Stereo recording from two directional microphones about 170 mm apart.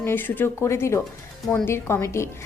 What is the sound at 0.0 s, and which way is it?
A woman's voice, 10° left (ahead or behind).